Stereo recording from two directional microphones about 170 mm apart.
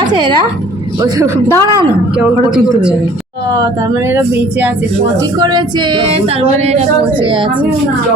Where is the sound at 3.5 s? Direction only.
20° right (ahead or behind).